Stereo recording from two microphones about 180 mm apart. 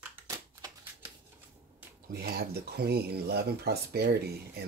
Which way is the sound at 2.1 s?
60° right (ahead or behind).